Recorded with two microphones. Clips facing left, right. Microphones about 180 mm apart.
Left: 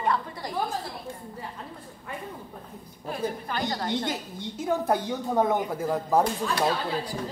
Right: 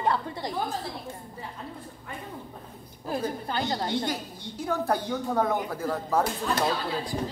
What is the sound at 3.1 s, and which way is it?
Speech, 30° right (ahead or behind).